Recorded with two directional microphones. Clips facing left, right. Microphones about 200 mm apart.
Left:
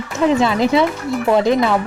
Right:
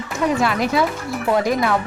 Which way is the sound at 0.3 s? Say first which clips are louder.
Left 5 dB; 25° left (ahead or behind).